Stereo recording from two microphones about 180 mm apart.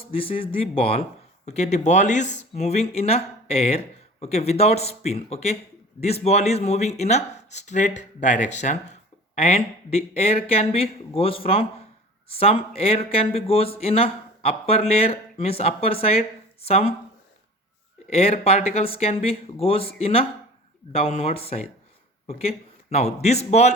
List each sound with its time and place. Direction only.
0.1 s a man's voice: 30° left (ahead or behind)
18.1 s speech: 35° left (ahead or behind)